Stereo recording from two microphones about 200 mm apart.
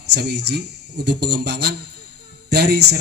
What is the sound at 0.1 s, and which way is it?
A man's voice, 55° right (ahead or behind).